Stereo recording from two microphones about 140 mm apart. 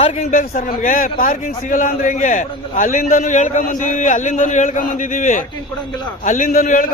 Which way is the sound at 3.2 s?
60° left (ahead or behind).